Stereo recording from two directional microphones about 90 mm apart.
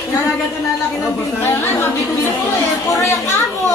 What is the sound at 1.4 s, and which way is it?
Chatter, 25° left (ahead or behind).